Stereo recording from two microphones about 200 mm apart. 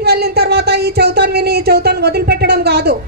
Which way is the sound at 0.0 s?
50° right (ahead or behind).